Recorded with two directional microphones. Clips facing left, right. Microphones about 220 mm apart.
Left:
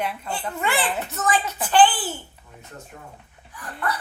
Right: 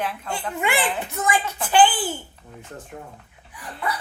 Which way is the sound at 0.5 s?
10° right (ahead or behind).